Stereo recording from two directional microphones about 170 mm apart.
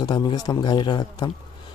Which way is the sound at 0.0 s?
25° left (ahead or behind).